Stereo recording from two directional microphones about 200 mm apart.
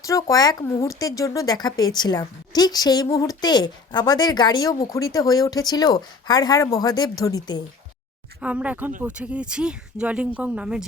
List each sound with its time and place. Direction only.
0.0 s speech: 15° left (ahead or behind)
8.4 s speech: 5° right (ahead or behind)